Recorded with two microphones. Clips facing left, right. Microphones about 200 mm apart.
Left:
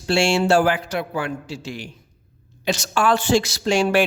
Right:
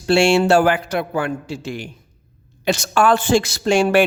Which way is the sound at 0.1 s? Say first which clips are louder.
Right 4 dB; 60° right (ahead or behind).